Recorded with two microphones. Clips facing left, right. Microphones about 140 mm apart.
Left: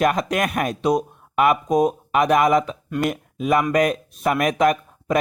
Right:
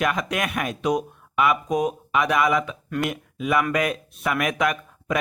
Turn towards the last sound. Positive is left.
turn(degrees=40)  # may be behind; listen again after turning